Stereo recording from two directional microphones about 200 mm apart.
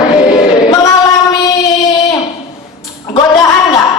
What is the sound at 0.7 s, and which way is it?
Singing, 15° left (ahead or behind).